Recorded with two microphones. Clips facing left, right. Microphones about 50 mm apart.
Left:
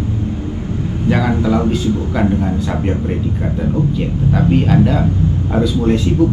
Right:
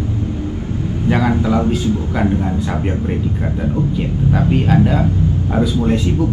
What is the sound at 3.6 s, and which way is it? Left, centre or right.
Speech, centre.